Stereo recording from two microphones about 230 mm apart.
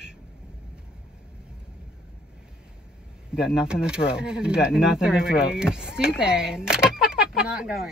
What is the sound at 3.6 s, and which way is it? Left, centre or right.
Speech, centre.